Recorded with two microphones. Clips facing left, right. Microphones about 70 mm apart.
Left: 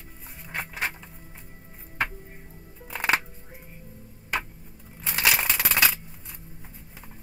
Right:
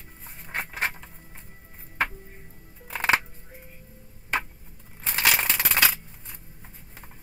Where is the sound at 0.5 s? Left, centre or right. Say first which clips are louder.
Right 1 dB; right.